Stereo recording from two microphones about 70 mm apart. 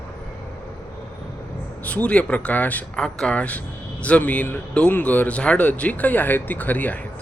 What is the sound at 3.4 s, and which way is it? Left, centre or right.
Speech, centre.